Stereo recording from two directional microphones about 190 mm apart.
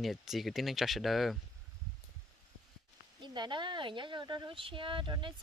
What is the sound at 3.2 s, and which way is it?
A woman's voice, 25° right (ahead or behind).